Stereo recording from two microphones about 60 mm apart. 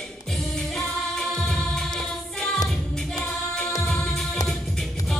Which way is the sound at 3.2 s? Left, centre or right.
Centre.